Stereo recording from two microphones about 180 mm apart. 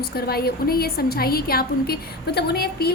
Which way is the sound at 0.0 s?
60° left (ahead or behind).